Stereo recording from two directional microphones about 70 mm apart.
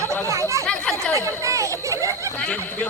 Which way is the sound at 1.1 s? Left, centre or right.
Right.